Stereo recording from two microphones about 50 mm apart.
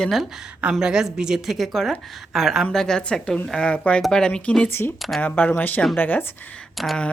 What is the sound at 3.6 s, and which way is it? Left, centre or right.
Speech, left.